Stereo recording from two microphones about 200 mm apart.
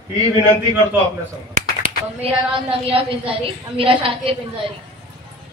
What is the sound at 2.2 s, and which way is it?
A woman's voice, 30° right (ahead or behind).